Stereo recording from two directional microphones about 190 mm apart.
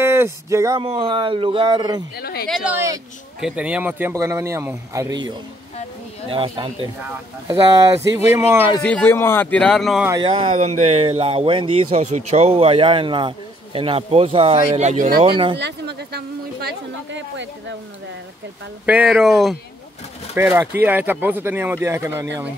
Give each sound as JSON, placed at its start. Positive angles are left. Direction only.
{"t": 0.0, "sound": "a sound", "side_deg": -15}
{"t": 0.8, "sound": "speech", "side_deg": -25}
{"t": 2.1, "sound": "speech", "side_deg": 55}
{"t": 2.4, "sound": "speech", "side_deg": -5}
{"t": 6.3, "sound": "speech", "side_deg": -25}
{"t": 8.8, "sound": "speech", "side_deg": 10}
{"t": 10.0, "sound": "speech", "side_deg": -25}
{"t": 15.1, "sound": "speech", "side_deg": -25}
{"t": 15.6, "sound": "speech", "side_deg": -60}
{"t": 18.9, "sound": "speech", "side_deg": -5}
{"t": 20.3, "sound": "speech", "side_deg": -10}